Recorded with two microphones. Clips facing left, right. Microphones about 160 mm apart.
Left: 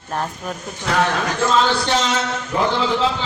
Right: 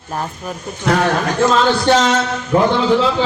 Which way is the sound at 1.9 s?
50° right (ahead or behind).